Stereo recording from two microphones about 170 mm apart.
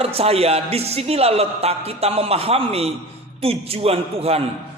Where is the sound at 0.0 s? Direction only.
35° right (ahead or behind).